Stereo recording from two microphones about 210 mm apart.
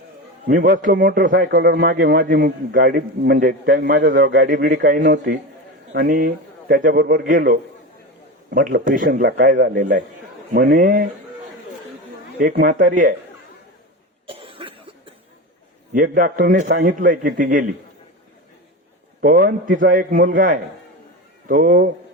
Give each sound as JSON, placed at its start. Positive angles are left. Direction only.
{"t": 0.4, "sound": "a man's voice", "side_deg": -40}
{"t": 12.4, "sound": "a man's voice", "side_deg": -40}
{"t": 14.3, "sound": "cough", "side_deg": -25}
{"t": 15.9, "sound": "a man's voice", "side_deg": -40}
{"t": 19.2, "sound": "a man's voice", "side_deg": -40}